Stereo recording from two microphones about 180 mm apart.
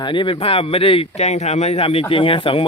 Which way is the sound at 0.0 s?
25° left (ahead or behind).